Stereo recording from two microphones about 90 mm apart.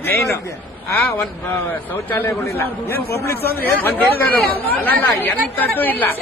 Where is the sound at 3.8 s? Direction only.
20° left (ahead or behind).